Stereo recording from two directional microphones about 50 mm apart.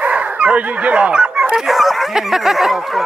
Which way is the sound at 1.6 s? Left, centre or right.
Centre.